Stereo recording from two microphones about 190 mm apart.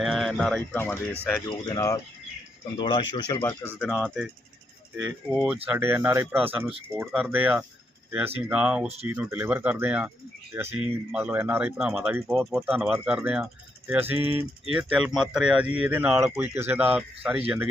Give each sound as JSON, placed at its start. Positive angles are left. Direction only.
{"t": 0.0, "sound": "speech", "side_deg": 0}
{"t": 3.4, "sound": "speech", "side_deg": 10}
{"t": 5.3, "sound": "speech", "side_deg": -5}
{"t": 12.1, "sound": "speech", "side_deg": -15}